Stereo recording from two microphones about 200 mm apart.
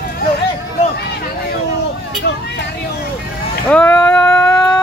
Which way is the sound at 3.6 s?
5° left (ahead or behind).